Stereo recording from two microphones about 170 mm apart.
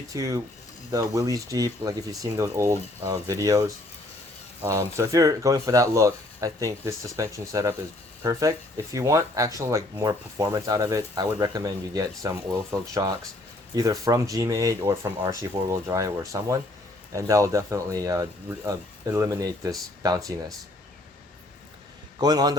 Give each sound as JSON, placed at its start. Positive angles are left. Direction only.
{"t": 0.1, "sound": "speech", "side_deg": -20}
{"t": 22.2, "sound": "speech", "side_deg": -20}